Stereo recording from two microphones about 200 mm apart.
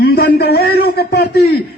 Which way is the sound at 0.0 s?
50° left (ahead or behind).